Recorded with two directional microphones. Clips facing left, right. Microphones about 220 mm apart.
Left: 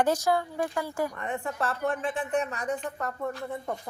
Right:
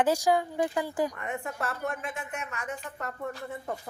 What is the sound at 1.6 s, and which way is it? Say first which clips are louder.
Speech: left 7 dB; 30° left (ahead or behind).